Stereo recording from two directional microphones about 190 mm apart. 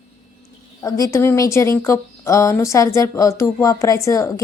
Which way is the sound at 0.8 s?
15° left (ahead or behind).